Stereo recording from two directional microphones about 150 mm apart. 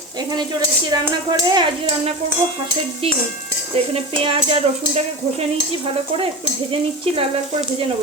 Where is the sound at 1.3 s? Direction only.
30° right (ahead or behind).